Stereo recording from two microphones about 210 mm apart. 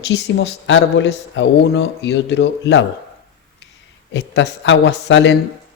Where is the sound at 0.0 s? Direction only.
55° left (ahead or behind).